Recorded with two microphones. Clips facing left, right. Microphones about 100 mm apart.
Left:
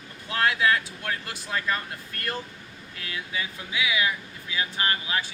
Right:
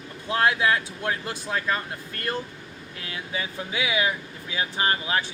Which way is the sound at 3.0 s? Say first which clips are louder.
Right 1 dB; 25° right (ahead or behind).